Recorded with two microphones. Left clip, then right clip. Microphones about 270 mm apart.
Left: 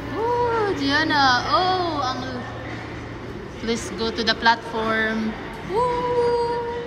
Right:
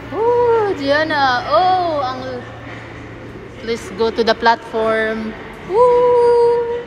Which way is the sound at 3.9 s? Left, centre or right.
Centre.